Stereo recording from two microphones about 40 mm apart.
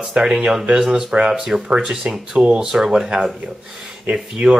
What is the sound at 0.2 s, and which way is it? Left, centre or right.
Speech, right.